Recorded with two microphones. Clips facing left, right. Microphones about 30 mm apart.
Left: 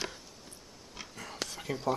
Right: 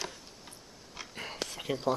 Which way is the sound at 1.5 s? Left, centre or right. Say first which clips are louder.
Right 2 dB; right.